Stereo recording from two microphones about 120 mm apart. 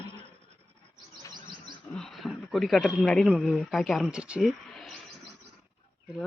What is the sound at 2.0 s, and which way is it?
Speech, centre (ahead or behind).